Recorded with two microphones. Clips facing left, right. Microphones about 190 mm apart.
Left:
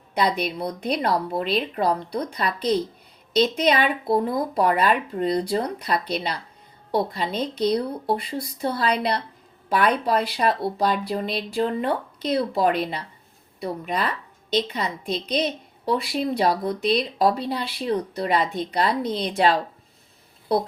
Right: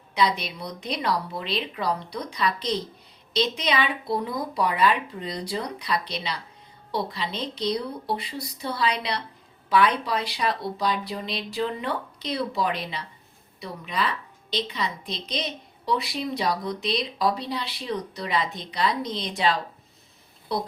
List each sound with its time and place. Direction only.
0.2 s a woman's voice: 55° left (ahead or behind)